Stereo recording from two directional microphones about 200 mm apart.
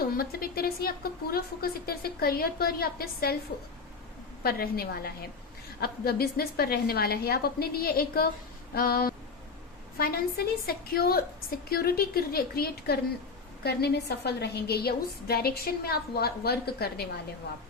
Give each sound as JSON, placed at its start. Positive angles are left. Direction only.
{"t": 0.0, "sound": "a woman's voice", "side_deg": 50}
{"t": 4.4, "sound": "a woman's voice", "side_deg": 50}